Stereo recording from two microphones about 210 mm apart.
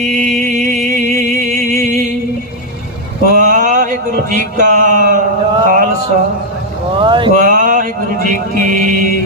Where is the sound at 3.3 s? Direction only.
40° right (ahead or behind).